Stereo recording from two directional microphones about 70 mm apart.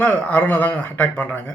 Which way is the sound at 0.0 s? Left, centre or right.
Left.